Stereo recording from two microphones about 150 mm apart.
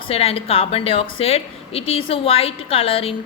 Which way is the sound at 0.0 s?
40° left (ahead or behind).